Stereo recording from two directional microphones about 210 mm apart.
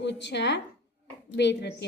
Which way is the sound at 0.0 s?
55° left (ahead or behind).